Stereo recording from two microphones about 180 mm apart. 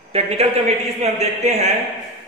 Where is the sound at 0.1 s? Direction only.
35° right (ahead or behind).